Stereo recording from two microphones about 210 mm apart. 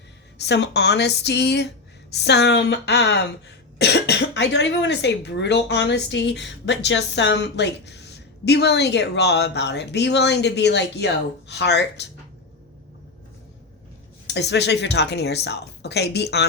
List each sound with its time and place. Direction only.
0.3 s speech: 55° left (ahead or behind)
14.3 s speech: 55° left (ahead or behind)